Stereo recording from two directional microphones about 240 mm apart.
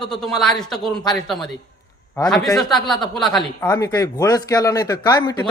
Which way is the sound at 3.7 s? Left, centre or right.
Centre.